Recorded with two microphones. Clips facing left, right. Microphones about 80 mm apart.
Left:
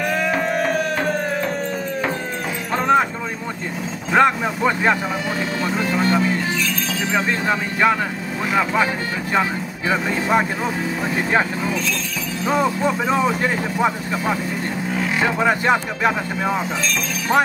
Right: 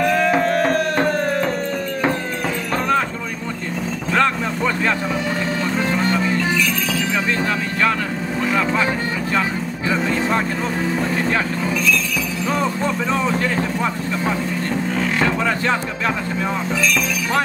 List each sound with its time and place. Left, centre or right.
0.0 s music: centre
4.1 s vehicle: centre
5.7 s vehicle: centre
12.4 s speech: centre
15.0 s vehicle: centre
15.4 s speech: centre